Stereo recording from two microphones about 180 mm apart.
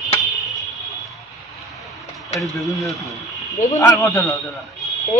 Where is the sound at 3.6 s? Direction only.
15° left (ahead or behind).